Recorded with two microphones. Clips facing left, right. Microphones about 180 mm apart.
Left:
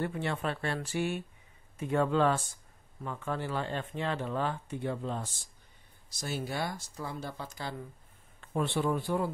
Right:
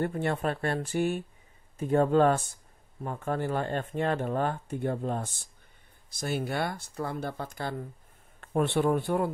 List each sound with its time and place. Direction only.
0.0 s speech: 50° right (ahead or behind)